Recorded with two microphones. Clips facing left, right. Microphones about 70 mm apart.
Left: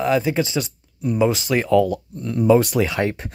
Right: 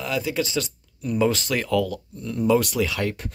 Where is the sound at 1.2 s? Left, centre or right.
Centre.